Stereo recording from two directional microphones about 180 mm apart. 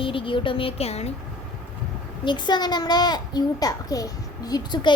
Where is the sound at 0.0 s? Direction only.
30° left (ahead or behind).